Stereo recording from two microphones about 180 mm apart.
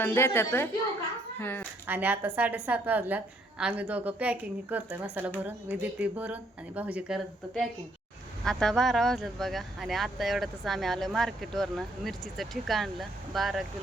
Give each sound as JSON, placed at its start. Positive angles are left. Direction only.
{"t": 0.0, "sound": "a woman's voice", "side_deg": 10}
{"t": 1.9, "sound": "speech", "side_deg": -10}
{"t": 8.4, "sound": "speech", "side_deg": 0}